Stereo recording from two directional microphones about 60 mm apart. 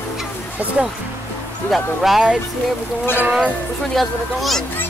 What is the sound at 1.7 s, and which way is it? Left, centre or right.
Speech, centre.